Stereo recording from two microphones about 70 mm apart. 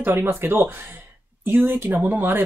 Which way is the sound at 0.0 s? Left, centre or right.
Right.